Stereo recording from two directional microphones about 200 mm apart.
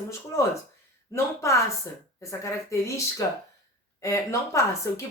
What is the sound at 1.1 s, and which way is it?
Speech, 15° left (ahead or behind).